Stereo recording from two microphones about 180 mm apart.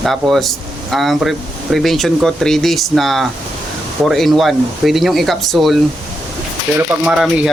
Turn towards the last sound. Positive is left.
turn(degrees=0)  # may be behind; listen again after turning